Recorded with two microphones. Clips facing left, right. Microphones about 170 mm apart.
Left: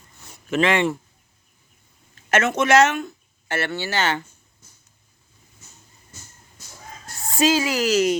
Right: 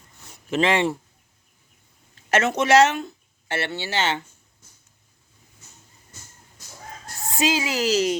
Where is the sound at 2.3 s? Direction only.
35° right (ahead or behind).